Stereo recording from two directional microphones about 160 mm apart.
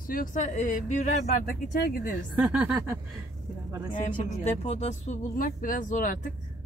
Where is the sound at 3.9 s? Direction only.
45° left (ahead or behind).